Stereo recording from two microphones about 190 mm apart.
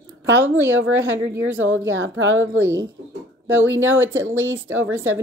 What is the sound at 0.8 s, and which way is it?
A woman's voice, 90° right.